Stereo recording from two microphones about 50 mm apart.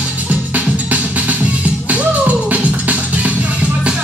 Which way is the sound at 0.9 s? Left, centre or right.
Right.